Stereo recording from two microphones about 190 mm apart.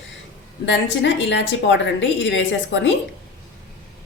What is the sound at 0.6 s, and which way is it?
A woman's voice, 70° left (ahead or behind).